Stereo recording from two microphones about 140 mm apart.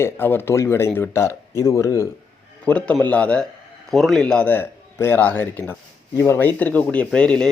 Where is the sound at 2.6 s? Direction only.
10° left (ahead or behind).